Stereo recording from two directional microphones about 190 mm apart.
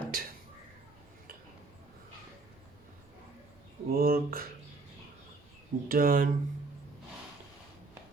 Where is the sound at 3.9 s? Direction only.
50° right (ahead or behind).